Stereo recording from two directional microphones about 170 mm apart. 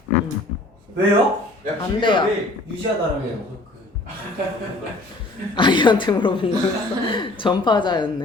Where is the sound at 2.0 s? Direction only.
30° left (ahead or behind).